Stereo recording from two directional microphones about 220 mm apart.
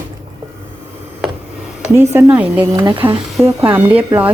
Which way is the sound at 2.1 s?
10° right (ahead or behind).